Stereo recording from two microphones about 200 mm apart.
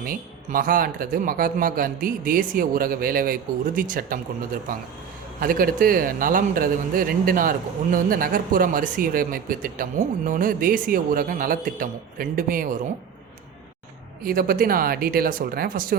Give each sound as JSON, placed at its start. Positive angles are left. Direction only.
{"t": 0.0, "sound": "a man's voice", "side_deg": -45}
{"t": 5.4, "sound": "a man's voice", "side_deg": -45}
{"t": 14.3, "sound": "a man's voice", "side_deg": -45}